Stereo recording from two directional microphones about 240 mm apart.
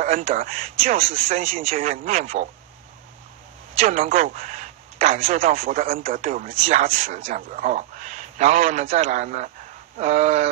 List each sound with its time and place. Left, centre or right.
0.0 s speech: right
3.7 s a man's voice: right